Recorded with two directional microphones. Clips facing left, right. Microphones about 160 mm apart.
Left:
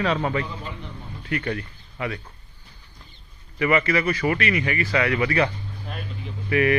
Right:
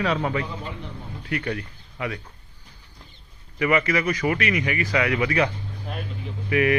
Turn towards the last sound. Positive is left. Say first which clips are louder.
# even
turn(degrees=-10)  # may be behind; listen again after turning